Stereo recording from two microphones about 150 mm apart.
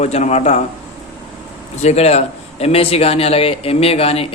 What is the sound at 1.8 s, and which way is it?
A man's voice, 45° left (ahead or behind).